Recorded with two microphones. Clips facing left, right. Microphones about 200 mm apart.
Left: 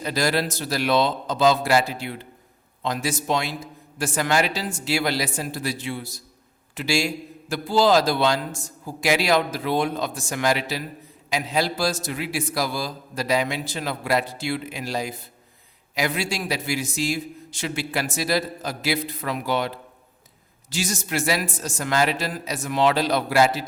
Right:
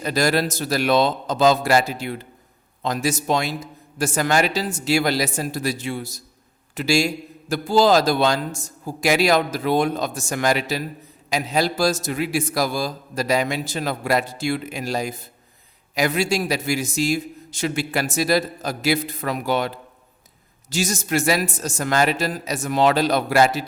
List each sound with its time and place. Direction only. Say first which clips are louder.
0.0 s a man's voice: right 3 dB; 45° right (ahead or behind)